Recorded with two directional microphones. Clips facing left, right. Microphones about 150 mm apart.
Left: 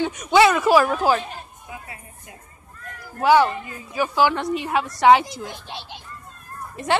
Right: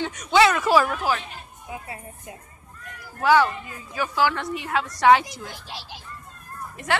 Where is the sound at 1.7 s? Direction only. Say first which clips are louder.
Right 6 dB; 25° right (ahead or behind).